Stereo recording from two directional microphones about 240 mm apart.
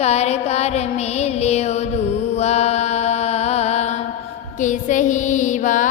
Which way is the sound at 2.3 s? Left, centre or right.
Left.